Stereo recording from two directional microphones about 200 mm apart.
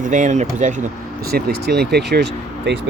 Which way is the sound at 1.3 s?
55° right (ahead or behind).